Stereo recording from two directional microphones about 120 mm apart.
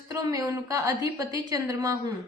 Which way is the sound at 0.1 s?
30° right (ahead or behind).